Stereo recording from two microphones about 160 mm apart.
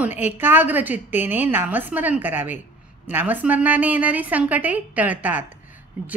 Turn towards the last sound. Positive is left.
turn(degrees=-10)  # may be behind; listen again after turning